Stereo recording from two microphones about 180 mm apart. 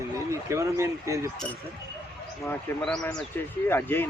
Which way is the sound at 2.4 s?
5° left (ahead or behind).